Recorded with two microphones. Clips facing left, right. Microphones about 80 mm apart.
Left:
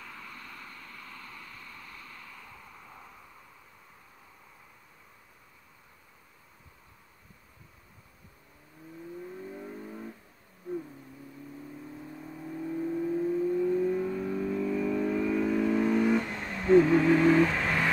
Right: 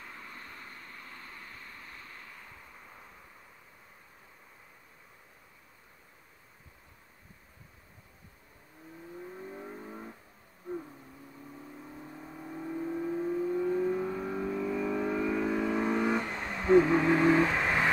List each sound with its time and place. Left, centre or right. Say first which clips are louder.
0.0 s a sound: left 1 dB; right
9.4 s vehicle: left 2 dB; centre
11.7 s vehicle: left 3 dB; centre